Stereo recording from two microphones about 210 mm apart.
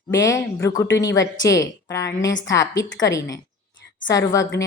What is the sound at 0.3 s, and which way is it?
Speech, 15° left (ahead or behind).